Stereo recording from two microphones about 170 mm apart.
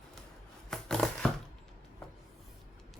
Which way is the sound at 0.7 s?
5° left (ahead or behind).